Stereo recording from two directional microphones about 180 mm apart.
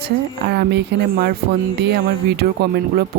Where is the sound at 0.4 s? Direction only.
65° right (ahead or behind).